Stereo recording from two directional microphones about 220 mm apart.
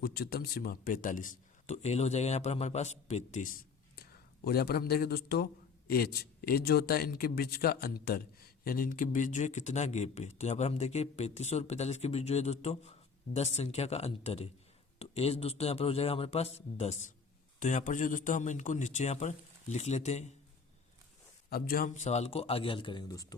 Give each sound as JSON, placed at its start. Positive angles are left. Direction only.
{"t": 0.0, "sound": "a man's voice", "side_deg": 45}
{"t": 21.5, "sound": "speech", "side_deg": 40}